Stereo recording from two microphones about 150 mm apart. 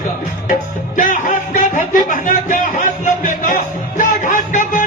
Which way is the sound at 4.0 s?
55° left (ahead or behind).